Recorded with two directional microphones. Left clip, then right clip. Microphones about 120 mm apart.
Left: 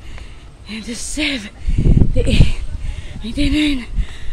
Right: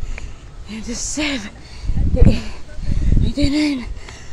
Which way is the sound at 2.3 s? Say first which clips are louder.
Left 3 dB; 65° left (ahead or behind).